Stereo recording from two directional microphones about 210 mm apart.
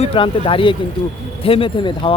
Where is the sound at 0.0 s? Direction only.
25° left (ahead or behind).